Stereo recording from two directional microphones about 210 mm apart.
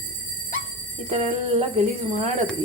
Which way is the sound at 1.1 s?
30° right (ahead or behind).